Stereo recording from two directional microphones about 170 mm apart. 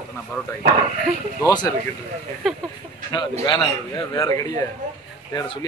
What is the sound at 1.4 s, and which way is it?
Speech, 25° left (ahead or behind).